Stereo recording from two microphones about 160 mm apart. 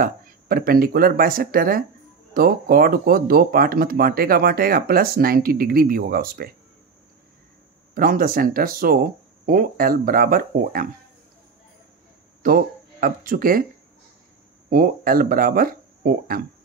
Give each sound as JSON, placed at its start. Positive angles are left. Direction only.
{"t": 0.0, "sound": "speech", "side_deg": -65}
{"t": 7.9, "sound": "speech", "side_deg": -65}
{"t": 12.4, "sound": "speech", "side_deg": -60}
{"t": 14.7, "sound": "speech", "side_deg": -65}